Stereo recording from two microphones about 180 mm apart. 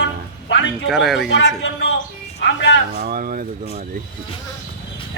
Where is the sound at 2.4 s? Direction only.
70° left (ahead or behind).